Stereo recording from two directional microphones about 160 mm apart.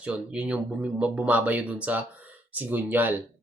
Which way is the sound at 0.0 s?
5° right (ahead or behind).